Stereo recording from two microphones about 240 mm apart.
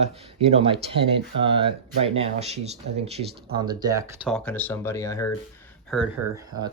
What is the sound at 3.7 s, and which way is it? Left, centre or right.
Speech, centre.